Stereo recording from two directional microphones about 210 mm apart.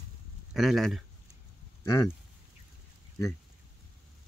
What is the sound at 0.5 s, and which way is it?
Speech, centre (ahead or behind).